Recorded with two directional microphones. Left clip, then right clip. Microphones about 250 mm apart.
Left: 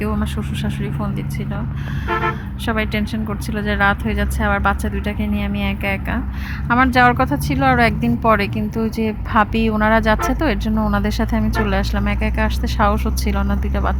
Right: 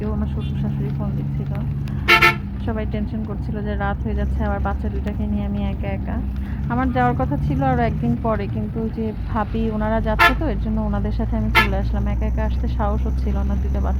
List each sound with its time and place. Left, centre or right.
0.0 s speech: left
2.6 s speech: left